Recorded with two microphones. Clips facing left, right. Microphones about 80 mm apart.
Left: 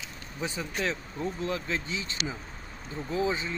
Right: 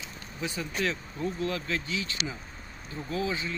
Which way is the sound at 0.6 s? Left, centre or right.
Centre.